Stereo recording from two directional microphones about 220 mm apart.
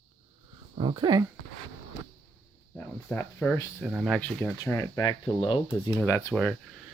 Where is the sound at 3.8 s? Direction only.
Centre (ahead or behind); by 5.7 s 25° left (ahead or behind).